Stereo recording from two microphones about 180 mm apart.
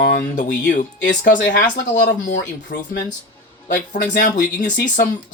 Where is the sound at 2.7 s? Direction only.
65° left (ahead or behind).